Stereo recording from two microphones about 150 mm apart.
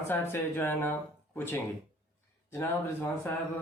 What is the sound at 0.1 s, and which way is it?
Speech, 15° left (ahead or behind).